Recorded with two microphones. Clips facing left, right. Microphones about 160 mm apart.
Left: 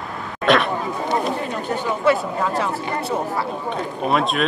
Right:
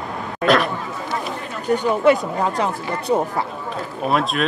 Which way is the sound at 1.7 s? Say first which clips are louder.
Right 4 dB; 15° right (ahead or behind).